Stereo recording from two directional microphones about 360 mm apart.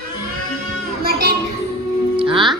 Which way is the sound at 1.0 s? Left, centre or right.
Right.